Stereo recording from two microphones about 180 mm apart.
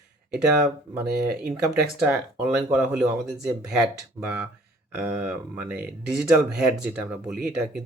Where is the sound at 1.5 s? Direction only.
5° right (ahead or behind).